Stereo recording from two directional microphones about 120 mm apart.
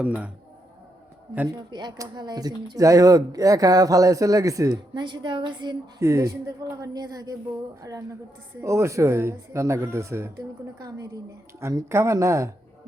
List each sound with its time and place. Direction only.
1.7 s speech: 35° right (ahead or behind)
6.0 s speech: 25° right (ahead or behind)